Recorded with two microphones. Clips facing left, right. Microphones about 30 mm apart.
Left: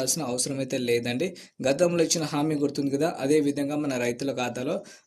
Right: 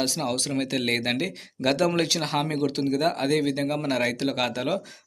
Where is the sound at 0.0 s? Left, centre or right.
Right.